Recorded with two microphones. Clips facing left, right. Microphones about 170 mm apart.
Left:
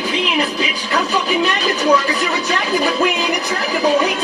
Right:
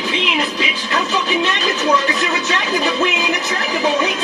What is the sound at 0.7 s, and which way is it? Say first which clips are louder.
Speech: left 1 dB; 10° left (ahead or behind).